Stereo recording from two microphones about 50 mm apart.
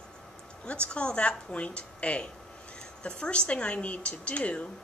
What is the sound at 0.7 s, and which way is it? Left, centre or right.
Speech, left.